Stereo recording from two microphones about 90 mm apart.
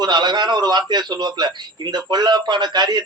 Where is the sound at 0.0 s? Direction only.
55° right (ahead or behind).